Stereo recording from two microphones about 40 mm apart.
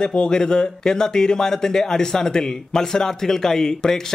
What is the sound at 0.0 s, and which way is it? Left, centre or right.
A man's voice, left.